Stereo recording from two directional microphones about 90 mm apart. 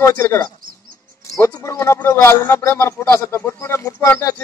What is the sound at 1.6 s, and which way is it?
A man's voice, 30° left (ahead or behind).